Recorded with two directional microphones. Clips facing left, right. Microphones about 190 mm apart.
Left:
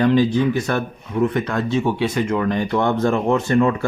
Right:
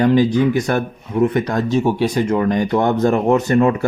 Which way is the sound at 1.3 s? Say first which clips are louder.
Right 3 dB; 40° right (ahead or behind).